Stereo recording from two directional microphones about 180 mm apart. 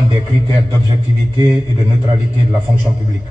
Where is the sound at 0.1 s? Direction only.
20° right (ahead or behind).